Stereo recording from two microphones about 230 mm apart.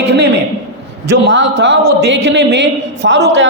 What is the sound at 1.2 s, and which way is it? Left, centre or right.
A man's voice, right.